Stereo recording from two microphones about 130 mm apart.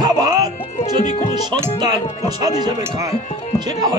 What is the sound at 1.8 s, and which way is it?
Speech, 30° right (ahead or behind).